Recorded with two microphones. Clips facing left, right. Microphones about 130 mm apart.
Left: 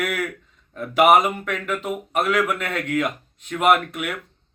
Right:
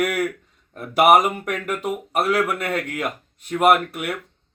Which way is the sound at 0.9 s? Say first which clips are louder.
Right 1 dB; 10° right (ahead or behind).